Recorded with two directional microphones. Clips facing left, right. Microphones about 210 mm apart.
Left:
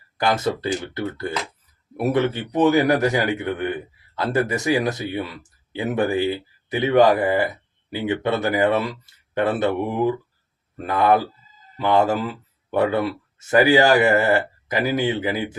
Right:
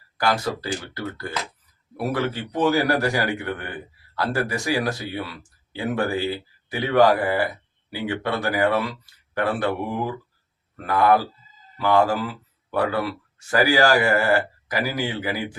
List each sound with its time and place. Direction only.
0.2 s speech: 20° left (ahead or behind)